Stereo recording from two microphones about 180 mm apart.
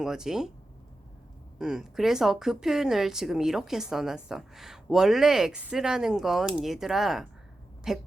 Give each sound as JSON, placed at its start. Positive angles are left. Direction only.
{"t": 0.0, "sound": "speech", "side_deg": -5}
{"t": 1.5, "sound": "speech", "side_deg": -5}